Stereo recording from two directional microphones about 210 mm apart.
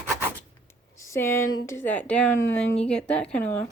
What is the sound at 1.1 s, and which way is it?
Speech, 10° left (ahead or behind).